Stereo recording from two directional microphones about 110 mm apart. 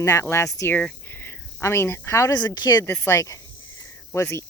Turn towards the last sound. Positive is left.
turn(degrees=25)  # may be behind; listen again after turning